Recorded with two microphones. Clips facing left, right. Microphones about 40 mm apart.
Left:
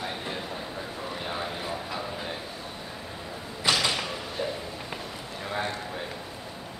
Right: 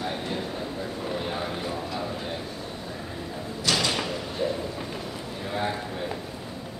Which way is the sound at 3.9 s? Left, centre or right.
Centre.